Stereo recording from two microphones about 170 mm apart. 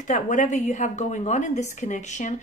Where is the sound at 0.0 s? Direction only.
50° left (ahead or behind).